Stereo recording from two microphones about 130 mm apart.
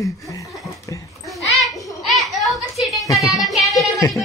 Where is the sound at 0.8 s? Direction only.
25° left (ahead or behind).